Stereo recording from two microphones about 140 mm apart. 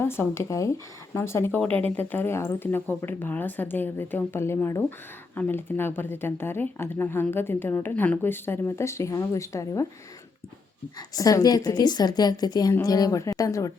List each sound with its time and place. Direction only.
0.0 s a woman's voice: 15° left (ahead or behind)
11.1 s a woman's voice: 25° left (ahead or behind)